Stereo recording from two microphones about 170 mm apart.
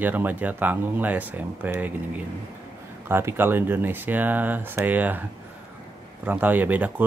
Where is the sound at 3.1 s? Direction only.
15° right (ahead or behind).